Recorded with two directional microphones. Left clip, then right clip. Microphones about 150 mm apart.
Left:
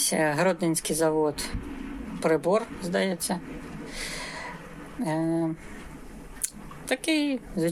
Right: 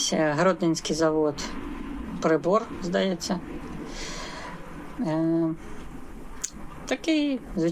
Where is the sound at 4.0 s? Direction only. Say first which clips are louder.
Left 3 dB; 25° left (ahead or behind).